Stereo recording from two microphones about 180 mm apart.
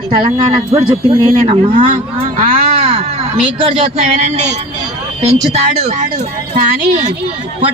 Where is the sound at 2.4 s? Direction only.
35° right (ahead or behind).